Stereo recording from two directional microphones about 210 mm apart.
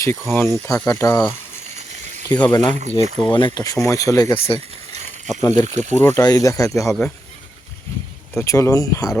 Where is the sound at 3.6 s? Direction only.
15° left (ahead or behind).